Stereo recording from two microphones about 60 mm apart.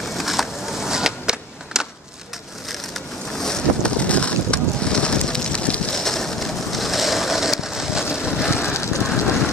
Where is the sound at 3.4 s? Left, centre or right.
Centre.